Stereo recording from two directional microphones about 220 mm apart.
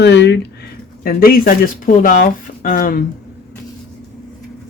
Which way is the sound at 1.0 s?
40° left (ahead or behind).